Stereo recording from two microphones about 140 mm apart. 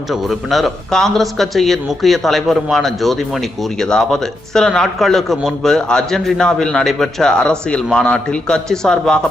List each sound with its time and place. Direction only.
0.1 s speech: centre (ahead or behind)